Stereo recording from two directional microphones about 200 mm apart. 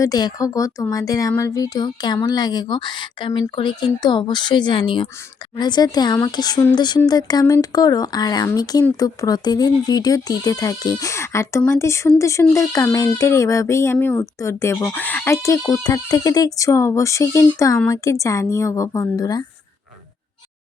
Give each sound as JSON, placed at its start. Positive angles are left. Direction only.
{"t": 0.0, "sound": "speech", "side_deg": 20}